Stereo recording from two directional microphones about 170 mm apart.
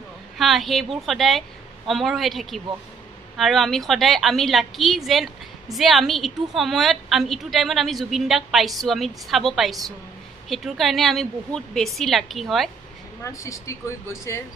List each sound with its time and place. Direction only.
0.4 s a woman's voice: centre (ahead or behind)
13.2 s speech: 20° left (ahead or behind)